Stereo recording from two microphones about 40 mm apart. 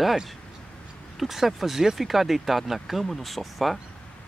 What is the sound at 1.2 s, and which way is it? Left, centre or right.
Speech, centre.